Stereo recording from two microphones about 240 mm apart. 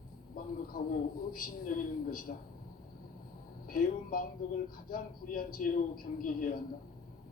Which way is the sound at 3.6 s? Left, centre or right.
Left.